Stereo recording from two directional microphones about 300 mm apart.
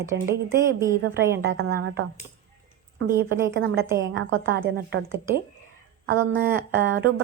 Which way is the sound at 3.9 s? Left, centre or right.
Right.